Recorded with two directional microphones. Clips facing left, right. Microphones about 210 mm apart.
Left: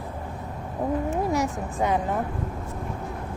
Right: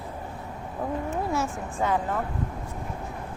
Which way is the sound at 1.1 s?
15° left (ahead or behind).